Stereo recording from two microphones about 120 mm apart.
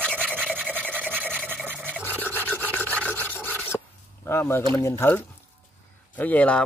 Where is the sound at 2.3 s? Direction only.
15° left (ahead or behind).